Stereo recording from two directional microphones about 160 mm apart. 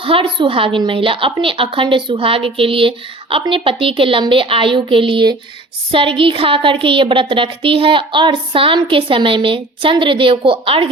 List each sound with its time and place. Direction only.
0.0 s a woman's voice: 35° right (ahead or behind)